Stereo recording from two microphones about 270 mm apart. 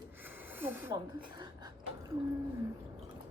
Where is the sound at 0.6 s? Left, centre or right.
Centre.